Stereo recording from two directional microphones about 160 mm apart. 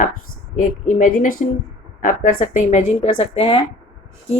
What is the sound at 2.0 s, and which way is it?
A woman's voice, 50° left (ahead or behind).